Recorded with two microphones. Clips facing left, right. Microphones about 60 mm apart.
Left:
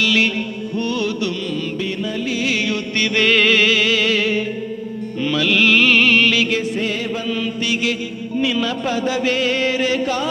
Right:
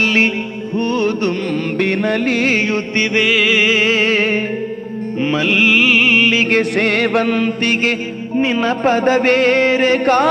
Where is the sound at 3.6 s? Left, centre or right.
Right.